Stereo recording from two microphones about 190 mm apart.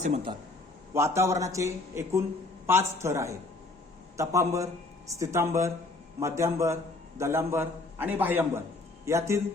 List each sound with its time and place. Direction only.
0.0 s a man's voice: 30° right (ahead or behind)
0.9 s speech: 15° right (ahead or behind)